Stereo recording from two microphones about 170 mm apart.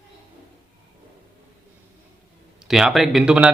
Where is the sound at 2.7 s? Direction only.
Centre (ahead or behind).